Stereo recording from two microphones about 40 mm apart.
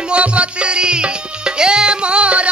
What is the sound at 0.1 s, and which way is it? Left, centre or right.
Music, right.